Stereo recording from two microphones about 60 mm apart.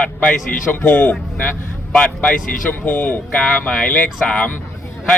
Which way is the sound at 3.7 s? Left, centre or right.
Centre.